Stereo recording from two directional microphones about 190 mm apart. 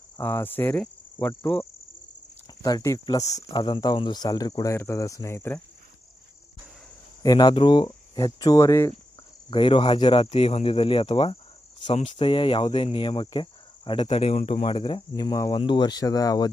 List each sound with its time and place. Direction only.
0.2 s speech: 10° left (ahead or behind)
7.2 s cricket: 20° left (ahead or behind)
9.5 s cricket: 25° left (ahead or behind)
11.8 s speech: 30° left (ahead or behind)
12.1 s cricket: 25° left (ahead or behind)